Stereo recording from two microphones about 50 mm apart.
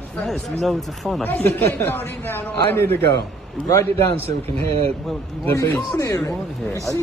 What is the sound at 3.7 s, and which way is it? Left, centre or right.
Speech, left.